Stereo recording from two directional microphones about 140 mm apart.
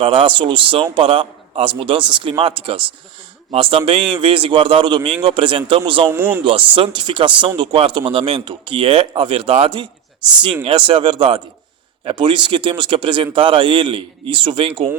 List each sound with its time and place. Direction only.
0.0 s speech: 40° right (ahead or behind)
6.1 s speech: 15° right (ahead or behind)
6.4 s speech: 40° right (ahead or behind)